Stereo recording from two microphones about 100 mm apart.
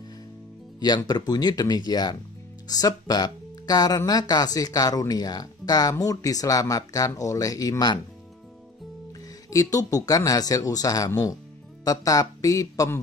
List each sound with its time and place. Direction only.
0.7 s speech: 45° left (ahead or behind)
9.5 s speech: 35° left (ahead or behind)